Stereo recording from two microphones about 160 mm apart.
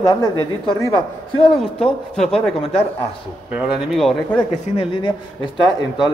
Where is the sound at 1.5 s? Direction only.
Centre (ahead or behind).